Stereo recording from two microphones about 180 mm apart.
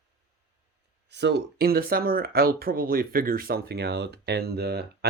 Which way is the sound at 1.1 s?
70° right (ahead or behind).